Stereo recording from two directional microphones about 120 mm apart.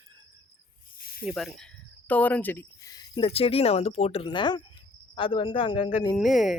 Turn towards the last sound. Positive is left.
turn(degrees=0)  # may be behind; listen again after turning